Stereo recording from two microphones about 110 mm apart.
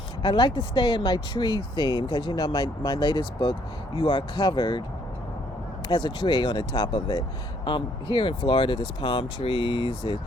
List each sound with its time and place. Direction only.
0.2 s speech: 40° left (ahead or behind)
5.9 s speech: 45° left (ahead or behind)